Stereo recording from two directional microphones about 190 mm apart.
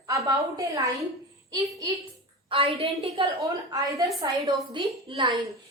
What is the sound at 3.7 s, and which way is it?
A woman's voice, 20° right (ahead or behind).